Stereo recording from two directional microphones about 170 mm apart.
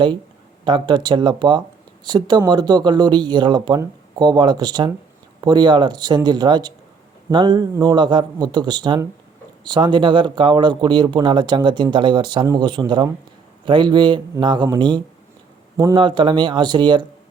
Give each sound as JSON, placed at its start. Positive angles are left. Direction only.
{"t": 0.6, "sound": "speech", "side_deg": -25}